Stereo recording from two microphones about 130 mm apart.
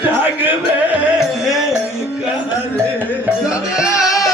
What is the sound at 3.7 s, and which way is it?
Music, 5° right (ahead or behind).